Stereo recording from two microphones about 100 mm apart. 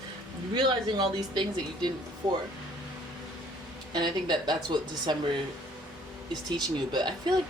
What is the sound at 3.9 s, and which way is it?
Speech, 45° right (ahead or behind).